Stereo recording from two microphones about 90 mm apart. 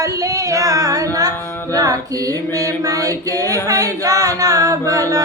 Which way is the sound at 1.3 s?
25° left (ahead or behind).